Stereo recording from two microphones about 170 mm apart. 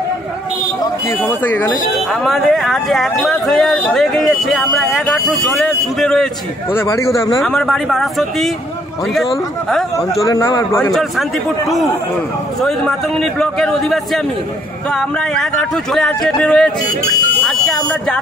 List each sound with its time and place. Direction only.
1.0 s speech: 10° left (ahead or behind)
6.7 s speech: 15° left (ahead or behind)
7.4 s speech: centre (ahead or behind)
9.9 s a man's voice: 20° left (ahead or behind)
10.9 s speech: centre (ahead or behind)
12.6 s speech: 5° left (ahead or behind)
17.5 s buzzer: 5° left (ahead or behind)